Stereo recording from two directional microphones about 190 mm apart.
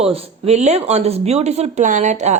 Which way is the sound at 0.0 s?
30° right (ahead or behind).